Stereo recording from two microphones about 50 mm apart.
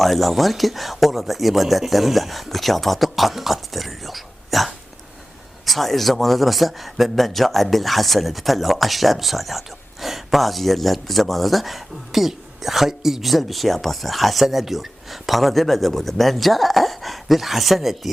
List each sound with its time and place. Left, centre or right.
0.0 s a man's voice: centre